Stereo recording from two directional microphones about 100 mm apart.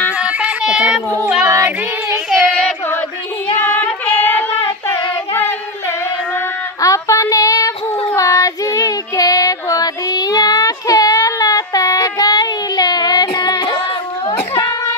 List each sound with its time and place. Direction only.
0.2 s child singing: 10° right (ahead or behind)
1.4 s child singing: 30° right (ahead or behind)
3.5 s child singing: 20° left (ahead or behind)
5.3 s singing: 20° left (ahead or behind)
6.8 s child singing: 35° left (ahead or behind)
14.5 s a sound: 35° left (ahead or behind)